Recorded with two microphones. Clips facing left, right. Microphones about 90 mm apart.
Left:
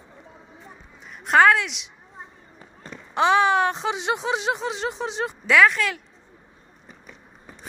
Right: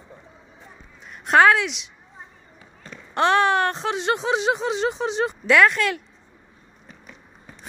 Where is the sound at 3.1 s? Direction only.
5° left (ahead or behind).